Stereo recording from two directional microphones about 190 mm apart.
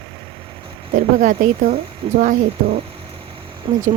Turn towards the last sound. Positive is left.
turn(degrees=-25)  # may be behind; listen again after turning